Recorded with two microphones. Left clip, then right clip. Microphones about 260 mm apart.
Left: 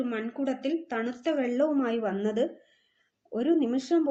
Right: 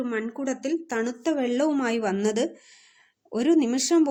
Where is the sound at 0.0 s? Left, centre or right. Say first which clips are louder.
Right 2 dB; right.